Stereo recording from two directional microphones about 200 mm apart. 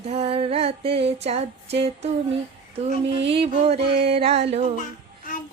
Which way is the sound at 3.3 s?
30° right (ahead or behind).